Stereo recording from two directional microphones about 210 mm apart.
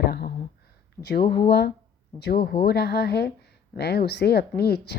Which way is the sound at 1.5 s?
50° left (ahead or behind).